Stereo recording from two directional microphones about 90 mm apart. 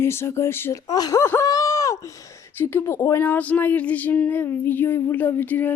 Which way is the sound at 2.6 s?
20° left (ahead or behind).